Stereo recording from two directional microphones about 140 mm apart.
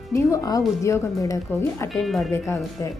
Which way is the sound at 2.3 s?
20° left (ahead or behind).